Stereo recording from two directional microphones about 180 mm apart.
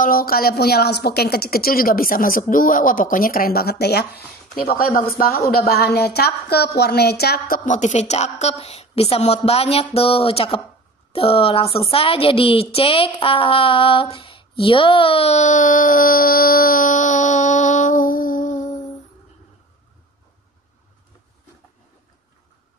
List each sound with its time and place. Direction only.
0.0 s a woman's voice: 55° left (ahead or behind)